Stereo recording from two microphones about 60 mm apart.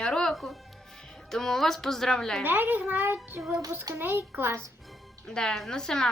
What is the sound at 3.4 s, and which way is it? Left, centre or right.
Speech, right.